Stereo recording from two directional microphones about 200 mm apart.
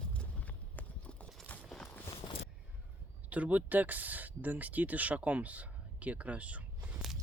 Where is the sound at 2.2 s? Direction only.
25° left (ahead or behind).